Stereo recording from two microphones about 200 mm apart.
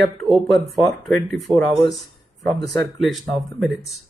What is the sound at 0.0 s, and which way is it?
Speech, centre (ahead or behind).